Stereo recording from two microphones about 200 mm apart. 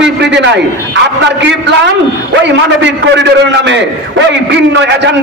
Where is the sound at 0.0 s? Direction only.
60° right (ahead or behind).